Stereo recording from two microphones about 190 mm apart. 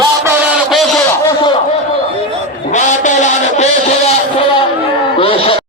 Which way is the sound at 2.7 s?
40° left (ahead or behind).